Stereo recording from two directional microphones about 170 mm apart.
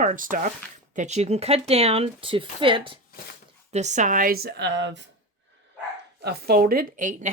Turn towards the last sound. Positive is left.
turn(degrees=-45)  # may be behind; listen again after turning